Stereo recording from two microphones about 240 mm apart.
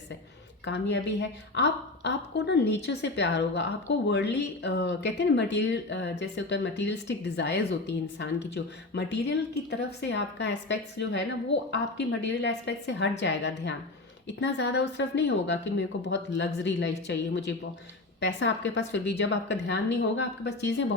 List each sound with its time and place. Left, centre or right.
0.6 s a woman's voice: left